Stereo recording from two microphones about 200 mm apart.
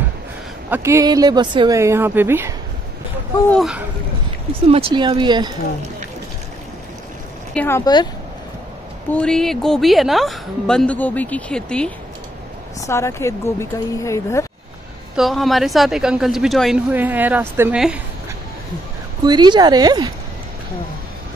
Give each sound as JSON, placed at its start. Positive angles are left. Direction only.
{"t": 0.7, "sound": "speech", "side_deg": -10}
{"t": 3.4, "sound": "speech", "side_deg": 0}
{"t": 4.6, "sound": "speech", "side_deg": -30}
{"t": 7.5, "sound": "speech", "side_deg": 10}
{"t": 9.1, "sound": "speech", "side_deg": 5}
{"t": 15.1, "sound": "speech", "side_deg": 0}
{"t": 19.2, "sound": "speech", "side_deg": -20}